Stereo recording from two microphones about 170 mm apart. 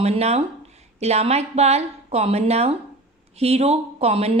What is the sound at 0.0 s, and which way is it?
Speech, 40° right (ahead or behind).